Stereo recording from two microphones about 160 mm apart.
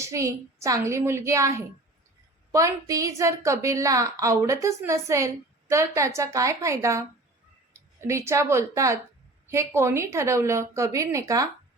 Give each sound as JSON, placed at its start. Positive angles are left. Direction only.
{"t": 0.0, "sound": "a woman's voice", "side_deg": -20}